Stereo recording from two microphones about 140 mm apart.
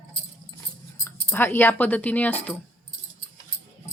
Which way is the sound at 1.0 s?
15° left (ahead or behind).